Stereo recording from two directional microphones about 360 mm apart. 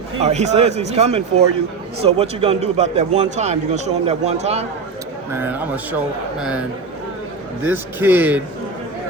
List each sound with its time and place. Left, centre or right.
0.2 s a man's voice: centre
5.3 s a man's voice: centre
7.6 s a man's voice: centre